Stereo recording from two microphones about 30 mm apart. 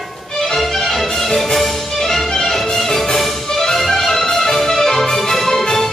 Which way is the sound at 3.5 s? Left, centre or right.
Centre.